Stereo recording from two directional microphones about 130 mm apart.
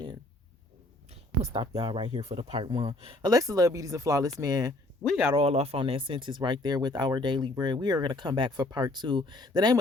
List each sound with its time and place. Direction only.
1.7 s speech: 55° right (ahead or behind); by 4.7 s 30° right (ahead or behind)
5.3 s speech: 50° right (ahead or behind); by 9.7 s 35° right (ahead or behind)